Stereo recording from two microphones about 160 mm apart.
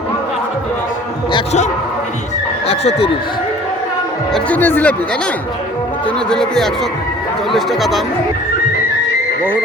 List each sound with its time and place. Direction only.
2.6 s speech: 40° left (ahead or behind)
4.3 s speech: 10° left (ahead or behind)
6.1 s speech: 5° left (ahead or behind)